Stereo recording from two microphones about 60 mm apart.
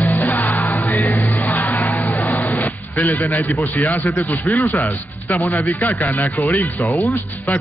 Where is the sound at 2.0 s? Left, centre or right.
Left.